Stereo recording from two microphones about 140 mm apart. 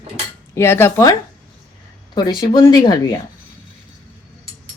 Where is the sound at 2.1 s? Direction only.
30° left (ahead or behind).